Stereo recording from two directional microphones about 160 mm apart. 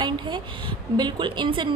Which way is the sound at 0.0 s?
30° right (ahead or behind).